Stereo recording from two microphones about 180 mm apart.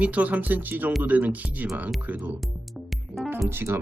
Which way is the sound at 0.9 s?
5° right (ahead or behind).